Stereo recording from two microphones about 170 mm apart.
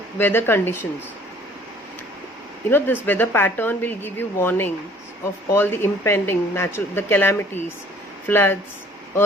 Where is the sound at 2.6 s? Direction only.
10° left (ahead or behind).